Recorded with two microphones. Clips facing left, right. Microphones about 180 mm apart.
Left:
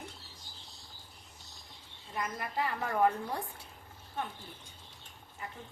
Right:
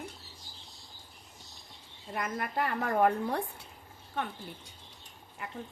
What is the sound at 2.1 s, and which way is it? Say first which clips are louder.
A woman's voice: right 3 dB; 60° right (ahead or behind).